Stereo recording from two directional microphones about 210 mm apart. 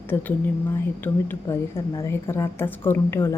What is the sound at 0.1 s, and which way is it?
A woman's voice, 10° left (ahead or behind).